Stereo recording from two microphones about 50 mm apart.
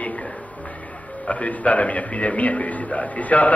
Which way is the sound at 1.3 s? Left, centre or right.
Left.